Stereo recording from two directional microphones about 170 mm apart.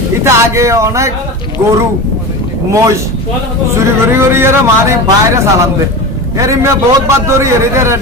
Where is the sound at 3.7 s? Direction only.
15° right (ahead or behind).